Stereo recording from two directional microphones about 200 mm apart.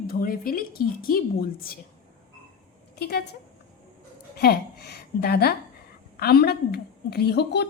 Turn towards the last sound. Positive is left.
turn(degrees=55)  # may be behind; listen again after turning